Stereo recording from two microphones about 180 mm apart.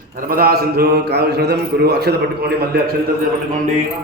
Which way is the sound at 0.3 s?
55° right (ahead or behind).